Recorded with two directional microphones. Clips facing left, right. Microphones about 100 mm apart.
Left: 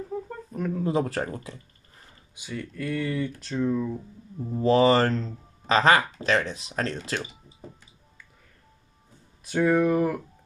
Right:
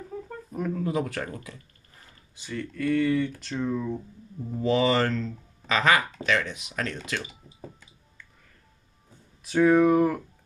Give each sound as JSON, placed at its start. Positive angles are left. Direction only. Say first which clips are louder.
{"t": 0.5, "sound": "a sound", "louder": "even", "side_deg": -10}
{"t": 0.8, "sound": "speech", "louder": "left 3 dB", "side_deg": 35}
{"t": 2.3, "sound": "speech", "louder": "right 1 dB", "side_deg": 10}
{"t": 4.6, "sound": "speech", "louder": "left 4 dB", "side_deg": 40}
{"t": 9.4, "sound": "speech", "louder": "right 3 dB", "side_deg": 0}